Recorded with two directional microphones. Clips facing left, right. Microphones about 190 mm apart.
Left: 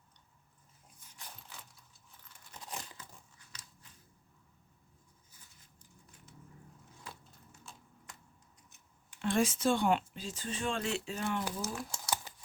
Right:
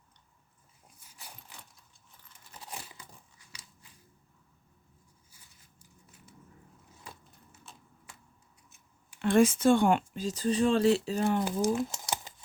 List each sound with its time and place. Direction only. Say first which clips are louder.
2.6 s crushing: even; 10° right (ahead or behind)
5.8 s scissors: right 2 dB; 10° right (ahead or behind)
7.6 s typewriter: even; centre (ahead or behind)
9.2 s speech: right 7 dB; 55° right (ahead or behind); by 11.4 s 35° right (ahead or behind)
11.6 s crumpling: right 11 dB; 20° right (ahead or behind)